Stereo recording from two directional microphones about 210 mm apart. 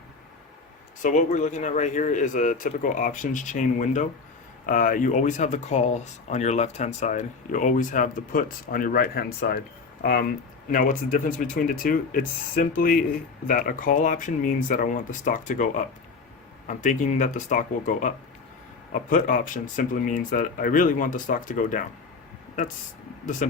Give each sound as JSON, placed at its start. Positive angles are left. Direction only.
{"t": 1.0, "sound": "speech", "side_deg": 35}
{"t": 23.2, "sound": "speech", "side_deg": 35}